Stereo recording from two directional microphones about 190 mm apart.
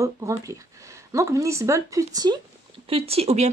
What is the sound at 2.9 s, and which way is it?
Speech, 30° right (ahead or behind).